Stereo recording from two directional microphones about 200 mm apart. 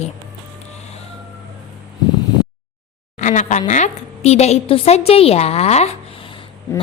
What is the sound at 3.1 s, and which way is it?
A woman's voice, 35° left (ahead or behind).